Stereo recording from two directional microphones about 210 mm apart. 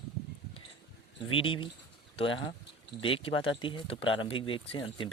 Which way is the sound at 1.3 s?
25° left (ahead or behind).